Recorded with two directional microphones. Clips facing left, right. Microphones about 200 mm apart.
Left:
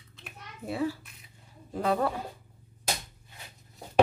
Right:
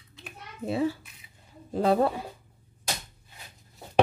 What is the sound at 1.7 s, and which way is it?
Speech, 30° right (ahead or behind).